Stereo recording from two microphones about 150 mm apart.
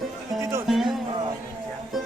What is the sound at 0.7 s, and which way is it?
Music, centre (ahead or behind).